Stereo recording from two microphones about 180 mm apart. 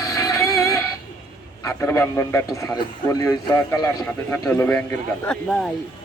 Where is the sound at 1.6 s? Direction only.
15° left (ahead or behind).